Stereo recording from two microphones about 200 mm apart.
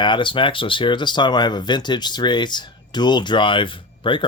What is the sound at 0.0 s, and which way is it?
Speech, 25° left (ahead or behind).